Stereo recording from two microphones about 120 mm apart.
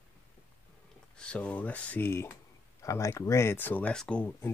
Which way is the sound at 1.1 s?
10° left (ahead or behind).